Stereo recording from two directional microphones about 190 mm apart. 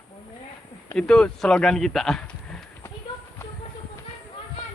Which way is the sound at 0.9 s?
5° left (ahead or behind).